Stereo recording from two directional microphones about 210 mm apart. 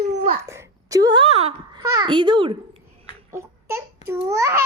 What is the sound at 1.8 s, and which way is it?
A child's voice, 15° right (ahead or behind).